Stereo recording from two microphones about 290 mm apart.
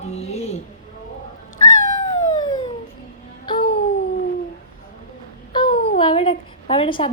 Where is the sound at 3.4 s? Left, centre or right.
Centre.